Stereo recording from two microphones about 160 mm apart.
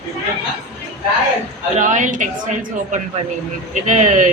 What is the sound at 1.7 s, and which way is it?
Speech, 50° right (ahead or behind).